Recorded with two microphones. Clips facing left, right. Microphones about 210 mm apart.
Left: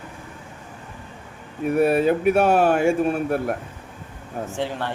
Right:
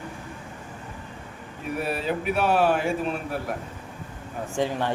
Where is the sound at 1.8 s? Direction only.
55° left (ahead or behind).